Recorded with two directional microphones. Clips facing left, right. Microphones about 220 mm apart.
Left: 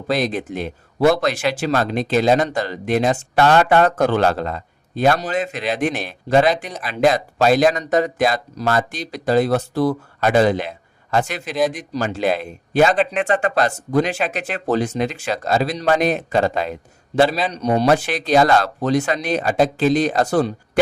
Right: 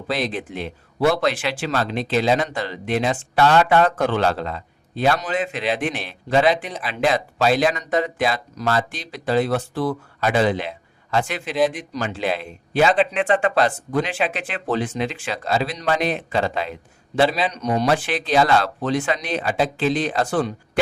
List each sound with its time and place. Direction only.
0.1 s speech: 45° left (ahead or behind)
17.3 s speech: 30° left (ahead or behind)